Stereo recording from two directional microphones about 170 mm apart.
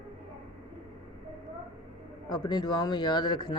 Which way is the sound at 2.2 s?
25° left (ahead or behind).